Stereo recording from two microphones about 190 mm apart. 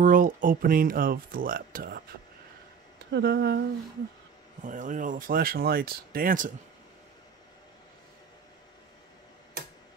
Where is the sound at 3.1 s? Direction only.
60° right (ahead or behind).